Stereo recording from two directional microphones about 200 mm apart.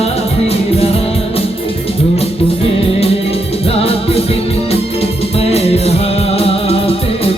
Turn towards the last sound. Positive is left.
turn(degrees=30)  # may be behind; listen again after turning